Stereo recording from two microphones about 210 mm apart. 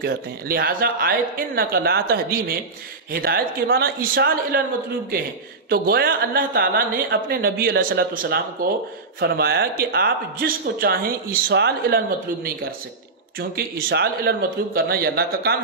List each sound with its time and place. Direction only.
0.0 s speech: 45° right (ahead or behind)
5.7 s speech: 45° right (ahead or behind)
13.4 s speech: 45° right (ahead or behind)